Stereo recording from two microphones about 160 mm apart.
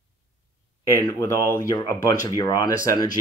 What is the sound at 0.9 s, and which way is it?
Speech, 20° left (ahead or behind).